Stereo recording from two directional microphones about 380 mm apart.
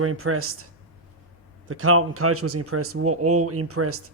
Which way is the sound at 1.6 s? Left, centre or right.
Right.